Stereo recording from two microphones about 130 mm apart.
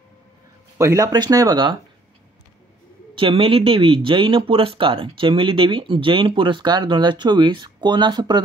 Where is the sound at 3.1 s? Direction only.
45° right (ahead or behind).